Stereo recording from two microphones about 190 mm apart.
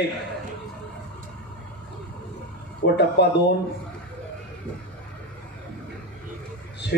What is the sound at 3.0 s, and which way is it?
Speech, 60° left (ahead or behind).